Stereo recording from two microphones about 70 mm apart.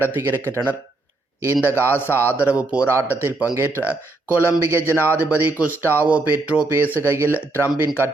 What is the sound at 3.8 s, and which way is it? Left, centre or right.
Speech, right.